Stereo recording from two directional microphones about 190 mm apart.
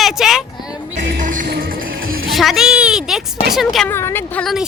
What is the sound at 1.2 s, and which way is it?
Music, 45° right (ahead or behind).